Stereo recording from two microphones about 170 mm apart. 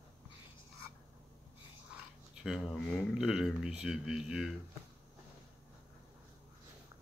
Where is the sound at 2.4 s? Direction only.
Centre (ahead or behind).